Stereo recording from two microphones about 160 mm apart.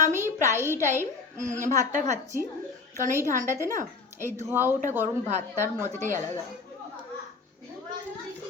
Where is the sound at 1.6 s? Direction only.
50° right (ahead or behind).